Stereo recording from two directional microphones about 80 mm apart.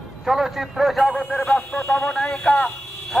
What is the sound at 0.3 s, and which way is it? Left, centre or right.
Speech, centre.